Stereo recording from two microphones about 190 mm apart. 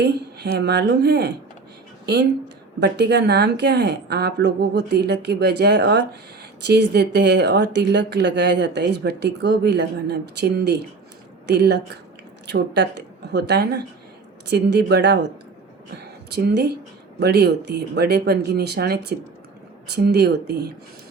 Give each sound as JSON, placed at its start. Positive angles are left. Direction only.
{"t": 0.0, "sound": "speech", "side_deg": -60}
{"t": 2.8, "sound": "speech", "side_deg": -60}
{"t": 16.3, "sound": "speech", "side_deg": -60}